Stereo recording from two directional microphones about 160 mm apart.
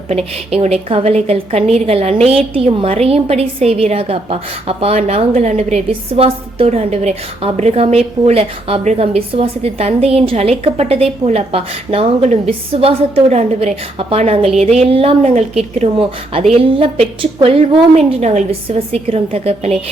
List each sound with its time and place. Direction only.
0.5 s a woman's voice: 40° right (ahead or behind)